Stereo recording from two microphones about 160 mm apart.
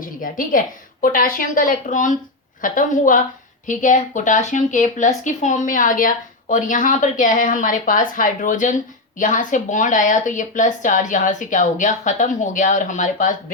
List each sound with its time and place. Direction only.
0.0 s a woman's voice: 60° left (ahead or behind)